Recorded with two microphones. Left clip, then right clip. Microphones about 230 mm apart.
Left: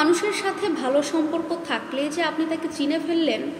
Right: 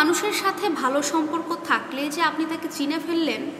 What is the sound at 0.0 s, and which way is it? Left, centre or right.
A woman's voice, centre.